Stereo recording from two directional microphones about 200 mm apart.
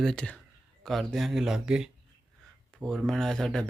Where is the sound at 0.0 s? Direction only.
5° left (ahead or behind).